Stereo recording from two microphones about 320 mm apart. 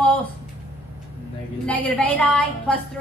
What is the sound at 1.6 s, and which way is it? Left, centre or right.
A woman's voice, centre.